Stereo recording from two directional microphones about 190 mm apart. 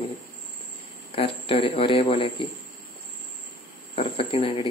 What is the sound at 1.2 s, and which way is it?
A man's voice, 30° left (ahead or behind).